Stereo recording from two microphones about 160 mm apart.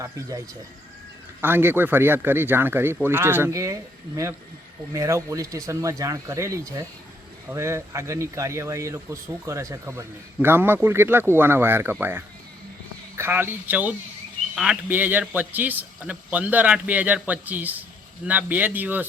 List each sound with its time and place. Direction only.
0.0 s speech: 20° right (ahead or behind)